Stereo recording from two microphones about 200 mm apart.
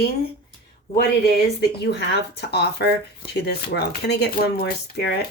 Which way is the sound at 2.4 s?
55° left (ahead or behind).